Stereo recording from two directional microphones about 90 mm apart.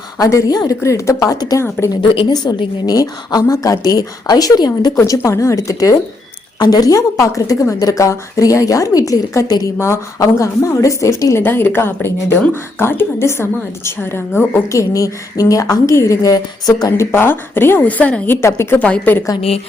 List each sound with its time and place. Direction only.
0.2 s speech: 40° left (ahead or behind)
0.8 s a woman's voice: 35° left (ahead or behind)
4.9 s a woman's voice: 35° left (ahead or behind)
9.7 s a woman's voice: 30° left (ahead or behind); by 16.9 s 45° left (ahead or behind)
16.9 s a woman's voice: 25° left (ahead or behind)
18.4 s a woman's voice: 30° left (ahead or behind)
18.8 s a woman's voice: 20° left (ahead or behind)